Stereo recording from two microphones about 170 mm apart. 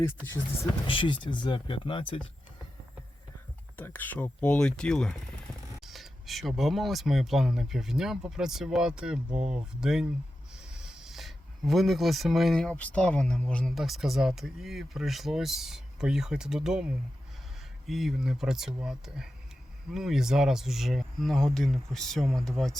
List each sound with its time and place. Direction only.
0.9 s speech: 30° left (ahead or behind)
3.8 s speech: 10° left (ahead or behind)